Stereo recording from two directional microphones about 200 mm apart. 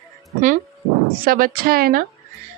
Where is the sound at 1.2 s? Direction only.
45° right (ahead or behind).